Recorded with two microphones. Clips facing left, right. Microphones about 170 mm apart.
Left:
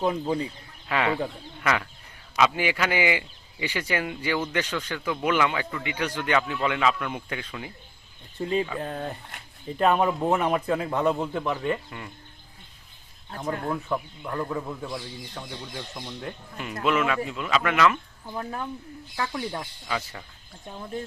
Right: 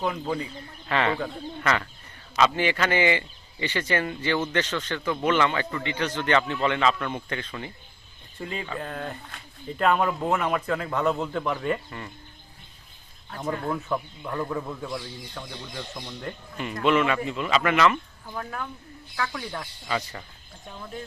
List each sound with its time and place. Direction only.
0.0 s speech: 25° left (ahead or behind)
0.9 s speech: 5° left (ahead or behind)
8.4 s speech: 30° left (ahead or behind); by 12.1 s 5° left (ahead or behind)
13.7 s speech: centre (ahead or behind)
18.3 s speech: 25° left (ahead or behind)
19.9 s speech: centre (ahead or behind)